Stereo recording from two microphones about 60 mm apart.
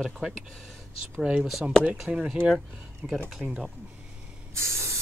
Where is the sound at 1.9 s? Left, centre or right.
Centre.